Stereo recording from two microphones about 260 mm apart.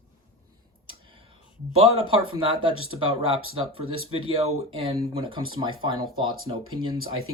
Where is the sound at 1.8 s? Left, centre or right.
Centre.